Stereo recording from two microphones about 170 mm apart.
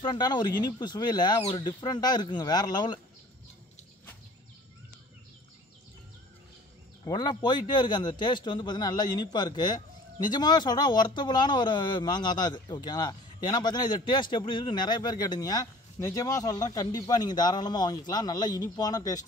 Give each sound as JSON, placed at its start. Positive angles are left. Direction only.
{"t": 0.0, "sound": "a man's voice", "side_deg": 25}
{"t": 7.1, "sound": "a man's voice", "side_deg": 25}